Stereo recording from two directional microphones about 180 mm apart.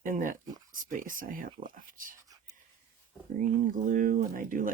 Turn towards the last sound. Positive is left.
turn(degrees=-50)  # may be behind; listen again after turning